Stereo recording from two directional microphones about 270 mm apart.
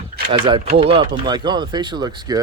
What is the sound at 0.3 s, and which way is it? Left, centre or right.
Speech, centre.